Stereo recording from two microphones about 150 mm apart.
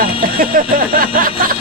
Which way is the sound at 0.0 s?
70° right (ahead or behind).